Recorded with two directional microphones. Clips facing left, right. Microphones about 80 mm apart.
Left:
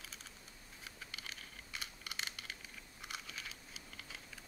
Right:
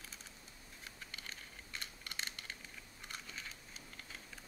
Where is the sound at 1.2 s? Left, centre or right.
Centre.